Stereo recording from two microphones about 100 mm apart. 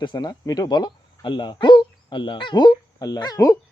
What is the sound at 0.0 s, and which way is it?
A man's voice, 50° left (ahead or behind).